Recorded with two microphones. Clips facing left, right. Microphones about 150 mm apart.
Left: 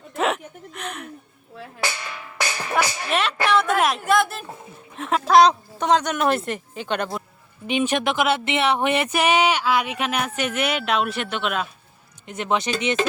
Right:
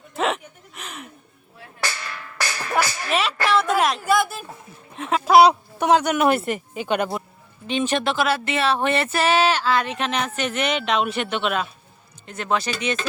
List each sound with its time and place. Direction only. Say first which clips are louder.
0.2 s a sound: left 1 dB; centre (ahead or behind)
1.8 s music: left 1 dB; 15° left (ahead or behind)
3.1 s a sound: left 1 dB; centre (ahead or behind)
5.2 s speech: right 1 dB; 10° right (ahead or behind)
7.7 s speech: left 1 dB; 10° left (ahead or behind)
12.2 s speech: left 1 dB; 20° left (ahead or behind)